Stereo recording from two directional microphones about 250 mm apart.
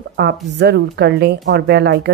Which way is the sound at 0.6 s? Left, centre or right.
Right.